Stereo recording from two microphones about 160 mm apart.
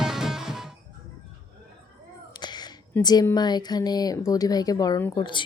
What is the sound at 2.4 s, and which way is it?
Speech, 25° left (ahead or behind).